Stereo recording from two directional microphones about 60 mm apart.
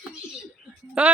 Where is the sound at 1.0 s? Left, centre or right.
Right.